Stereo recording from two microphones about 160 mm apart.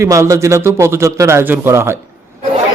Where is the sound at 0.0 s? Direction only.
20° right (ahead or behind).